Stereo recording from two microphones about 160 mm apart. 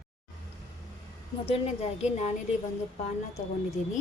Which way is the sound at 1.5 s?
40° left (ahead or behind).